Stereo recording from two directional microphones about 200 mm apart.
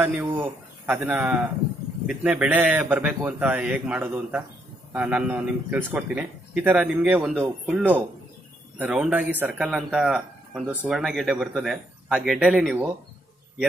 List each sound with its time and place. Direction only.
0.0 s speech: 5° right (ahead or behind)